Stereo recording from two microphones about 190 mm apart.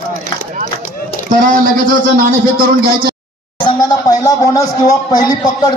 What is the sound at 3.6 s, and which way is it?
Speech, 20° left (ahead or behind).